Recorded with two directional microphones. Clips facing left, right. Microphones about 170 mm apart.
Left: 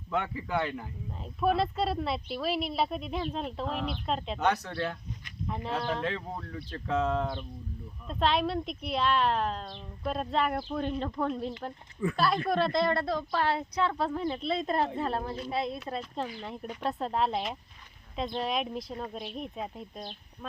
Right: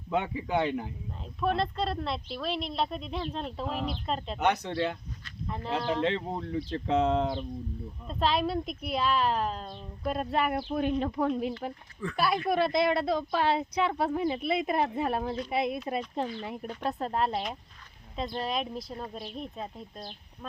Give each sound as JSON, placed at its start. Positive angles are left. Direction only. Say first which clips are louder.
{"t": 0.1, "sound": "speech", "louder": "right 2 dB", "side_deg": -20}
{"t": 1.4, "sound": "speech", "louder": "left 2 dB", "side_deg": 5}
{"t": 4.4, "sound": "speech", "louder": "right 3 dB", "side_deg": -20}
{"t": 5.5, "sound": "speech", "louder": "right 1 dB", "side_deg": 0}
{"t": 6.0, "sound": "speech", "louder": "right 5 dB", "side_deg": -25}
{"t": 8.0, "sound": "speech", "louder": "even", "side_deg": 0}